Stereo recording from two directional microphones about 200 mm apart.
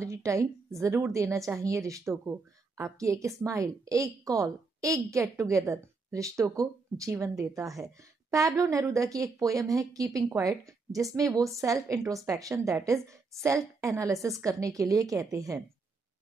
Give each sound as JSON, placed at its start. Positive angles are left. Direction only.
{"t": 0.0, "sound": "speech", "side_deg": -15}